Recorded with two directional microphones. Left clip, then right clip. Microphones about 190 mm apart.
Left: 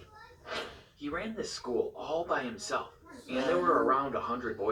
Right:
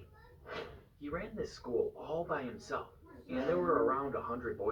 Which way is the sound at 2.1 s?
30° left (ahead or behind).